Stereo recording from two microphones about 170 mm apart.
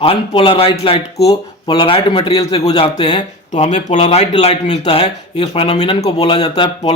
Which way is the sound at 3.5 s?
40° left (ahead or behind).